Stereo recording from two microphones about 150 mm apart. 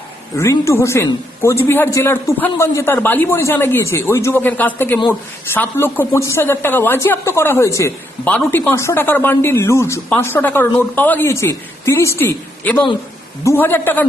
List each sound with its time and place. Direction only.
0.5 s a man's voice: 20° left (ahead or behind)